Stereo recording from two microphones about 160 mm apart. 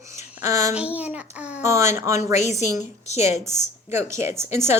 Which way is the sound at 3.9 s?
15° right (ahead or behind).